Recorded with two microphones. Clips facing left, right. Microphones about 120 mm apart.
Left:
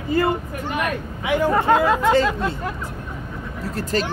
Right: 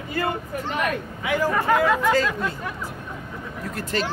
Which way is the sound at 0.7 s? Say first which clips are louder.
Left 2 dB; 15° left (ahead or behind).